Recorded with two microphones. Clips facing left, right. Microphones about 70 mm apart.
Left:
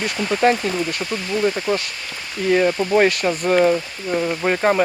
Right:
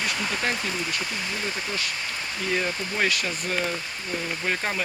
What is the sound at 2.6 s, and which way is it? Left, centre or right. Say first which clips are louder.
Speech: left 12 dB; left.